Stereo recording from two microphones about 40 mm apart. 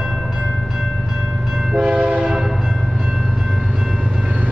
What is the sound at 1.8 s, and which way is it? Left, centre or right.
Train, right.